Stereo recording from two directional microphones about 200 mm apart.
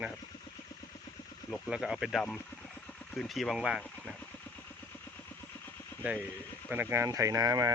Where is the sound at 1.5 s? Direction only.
Centre (ahead or behind).